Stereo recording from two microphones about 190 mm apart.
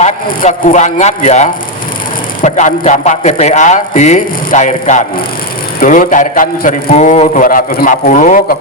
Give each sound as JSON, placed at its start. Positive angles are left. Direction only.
{"t": 0.0, "sound": "a man's voice", "side_deg": 40}